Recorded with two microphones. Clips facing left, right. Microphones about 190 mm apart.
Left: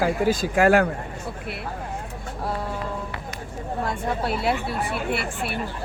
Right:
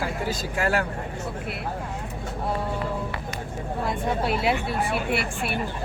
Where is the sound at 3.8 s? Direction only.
Centre (ahead or behind).